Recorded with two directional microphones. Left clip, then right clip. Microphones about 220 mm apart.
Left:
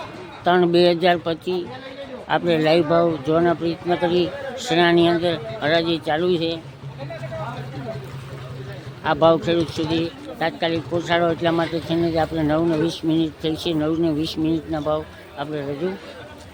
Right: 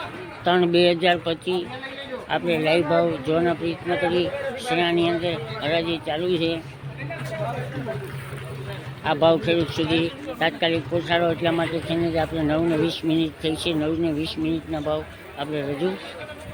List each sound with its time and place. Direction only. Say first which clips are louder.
0.4 s a man's voice: left 2 dB; 10° left (ahead or behind)
9.0 s a man's voice: left 2 dB; 10° left (ahead or behind)